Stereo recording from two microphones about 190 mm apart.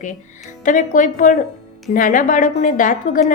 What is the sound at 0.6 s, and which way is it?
A woman's voice, 40° left (ahead or behind).